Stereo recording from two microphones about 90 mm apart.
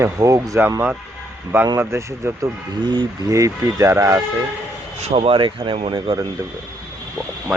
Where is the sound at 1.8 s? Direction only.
30° right (ahead or behind).